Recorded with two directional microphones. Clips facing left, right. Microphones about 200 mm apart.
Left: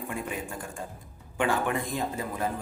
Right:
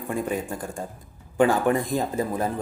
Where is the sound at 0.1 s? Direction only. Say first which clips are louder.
Right 10 dB; 40° right (ahead or behind).